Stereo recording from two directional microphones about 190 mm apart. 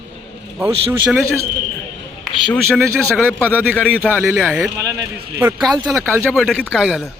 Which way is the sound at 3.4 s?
10° right (ahead or behind).